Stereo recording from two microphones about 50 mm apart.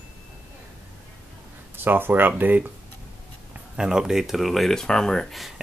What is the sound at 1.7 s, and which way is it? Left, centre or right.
Speech, right.